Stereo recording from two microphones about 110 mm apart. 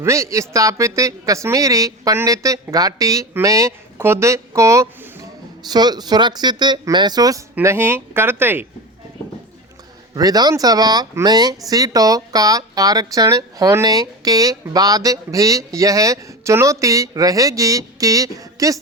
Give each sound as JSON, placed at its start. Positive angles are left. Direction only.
{"t": 0.0, "sound": "speech", "side_deg": -25}
{"t": 5.6, "sound": "speech", "side_deg": -40}
{"t": 7.6, "sound": "speech", "side_deg": -25}
{"t": 10.2, "sound": "speech", "side_deg": -35}